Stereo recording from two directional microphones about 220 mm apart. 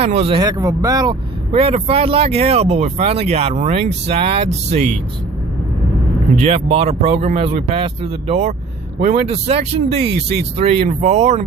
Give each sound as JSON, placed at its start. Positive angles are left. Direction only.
{"t": 0.0, "sound": "speech", "side_deg": -30}
{"t": 1.5, "sound": "speech", "side_deg": -25}
{"t": 6.3, "sound": "speech", "side_deg": -30}